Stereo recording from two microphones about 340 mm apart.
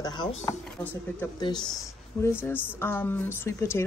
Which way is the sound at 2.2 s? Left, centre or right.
Centre.